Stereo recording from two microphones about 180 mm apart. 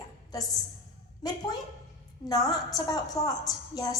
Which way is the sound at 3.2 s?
35° left (ahead or behind).